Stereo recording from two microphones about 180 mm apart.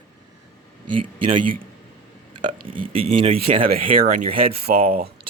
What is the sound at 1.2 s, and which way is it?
Speech, 30° right (ahead or behind).